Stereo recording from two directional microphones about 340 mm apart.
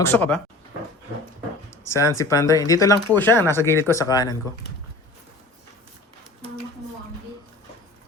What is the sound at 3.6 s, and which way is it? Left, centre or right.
Speech, centre.